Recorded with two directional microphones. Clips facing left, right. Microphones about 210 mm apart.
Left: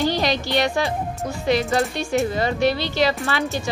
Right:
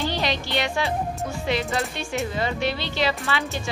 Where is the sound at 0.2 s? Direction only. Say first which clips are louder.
Left 5 dB; 40° left (ahead or behind).